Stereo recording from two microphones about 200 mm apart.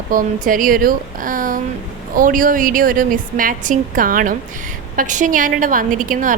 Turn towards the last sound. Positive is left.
turn(degrees=-40)  # may be behind; listen again after turning